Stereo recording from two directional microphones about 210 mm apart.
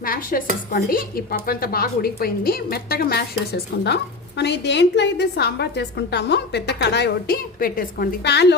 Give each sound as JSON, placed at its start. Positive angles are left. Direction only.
{"t": 0.0, "sound": "dishes", "side_deg": 40}